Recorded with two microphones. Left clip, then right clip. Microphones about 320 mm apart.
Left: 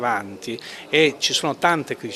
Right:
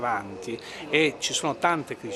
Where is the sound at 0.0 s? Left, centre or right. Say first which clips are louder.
Left 5 dB; left.